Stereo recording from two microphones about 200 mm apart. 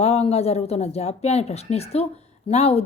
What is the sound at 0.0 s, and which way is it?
Speech, 30° left (ahead or behind).